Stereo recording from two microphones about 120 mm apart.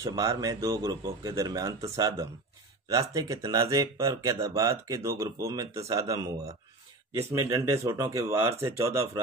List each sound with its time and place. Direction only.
0.0 s speech: 30° right (ahead or behind)